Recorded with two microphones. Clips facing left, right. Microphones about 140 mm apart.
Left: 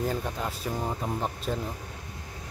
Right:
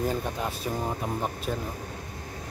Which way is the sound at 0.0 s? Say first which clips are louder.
Right 1 dB; 20° right (ahead or behind).